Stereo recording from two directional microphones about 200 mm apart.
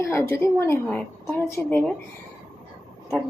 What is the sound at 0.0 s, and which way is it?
A woman's voice, 15° left (ahead or behind).